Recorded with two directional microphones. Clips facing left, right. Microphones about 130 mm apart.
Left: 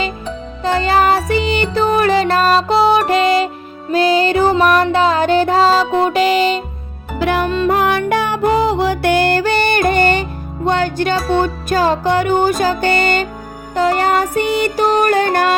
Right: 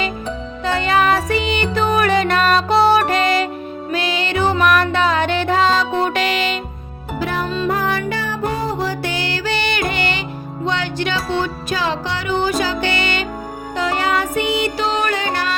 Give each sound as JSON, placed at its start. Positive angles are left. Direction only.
{"t": 0.6, "sound": "music", "side_deg": 35}
{"t": 2.6, "sound": "music", "side_deg": 0}
{"t": 2.9, "sound": "music", "side_deg": 30}
{"t": 7.2, "sound": "music", "side_deg": 70}